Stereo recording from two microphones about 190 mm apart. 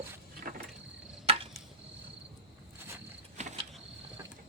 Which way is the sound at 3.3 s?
40° right (ahead or behind).